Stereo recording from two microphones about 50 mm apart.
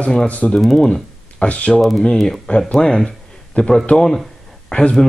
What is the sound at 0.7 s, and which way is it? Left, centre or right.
Speech, centre.